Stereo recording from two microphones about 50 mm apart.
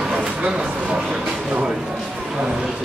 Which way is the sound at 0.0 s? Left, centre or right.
Centre.